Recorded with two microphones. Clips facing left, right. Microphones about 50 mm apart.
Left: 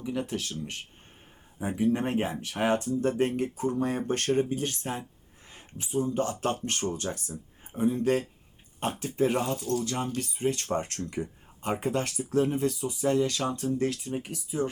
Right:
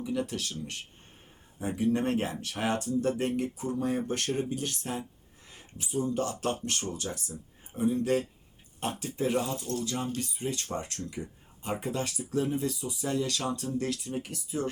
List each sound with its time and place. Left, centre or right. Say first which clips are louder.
0.0 s speech: even; left
1.5 s speech: left 1 dB; centre; by 3.7 s left
3.8 s speech: right 1 dB; left
9.8 s speech: left 2 dB; left; by 14.3 s centre